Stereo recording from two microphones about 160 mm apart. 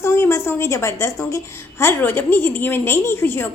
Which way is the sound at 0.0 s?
15° left (ahead or behind).